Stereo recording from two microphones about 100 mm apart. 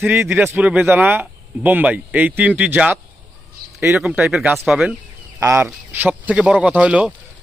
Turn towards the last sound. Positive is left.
turn(degrees=-10)  # may be behind; listen again after turning